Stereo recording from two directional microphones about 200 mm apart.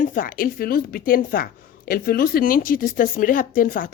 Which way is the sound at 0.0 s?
45° left (ahead or behind).